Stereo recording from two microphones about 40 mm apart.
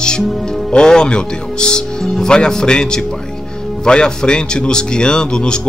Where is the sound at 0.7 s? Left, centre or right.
Centre.